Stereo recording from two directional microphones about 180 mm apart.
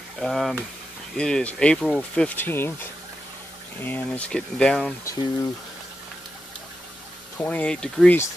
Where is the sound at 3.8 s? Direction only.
10° left (ahead or behind).